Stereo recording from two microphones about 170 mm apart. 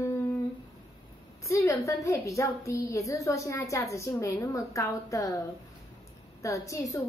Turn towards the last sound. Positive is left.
turn(degrees=20)  # may be behind; listen again after turning